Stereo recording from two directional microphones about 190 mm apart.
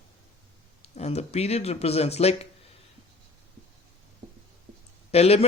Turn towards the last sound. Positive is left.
turn(degrees=30)  # may be behind; listen again after turning